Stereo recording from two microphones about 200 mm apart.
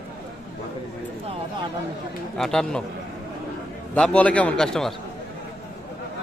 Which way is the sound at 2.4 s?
Centre (ahead or behind).